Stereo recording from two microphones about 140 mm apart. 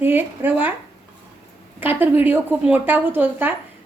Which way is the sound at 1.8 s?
15° right (ahead or behind).